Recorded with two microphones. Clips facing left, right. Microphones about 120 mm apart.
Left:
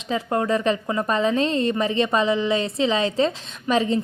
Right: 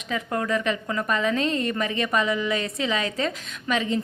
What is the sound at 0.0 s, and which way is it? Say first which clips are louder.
A woman's voice: left 4 dB; 30° left (ahead or behind).